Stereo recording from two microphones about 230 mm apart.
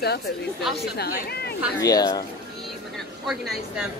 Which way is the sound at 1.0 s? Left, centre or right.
Left.